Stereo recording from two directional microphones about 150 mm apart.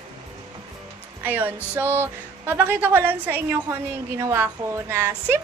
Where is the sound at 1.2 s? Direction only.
10° right (ahead or behind).